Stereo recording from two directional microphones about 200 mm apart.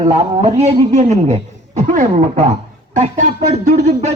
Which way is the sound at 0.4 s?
30° right (ahead or behind).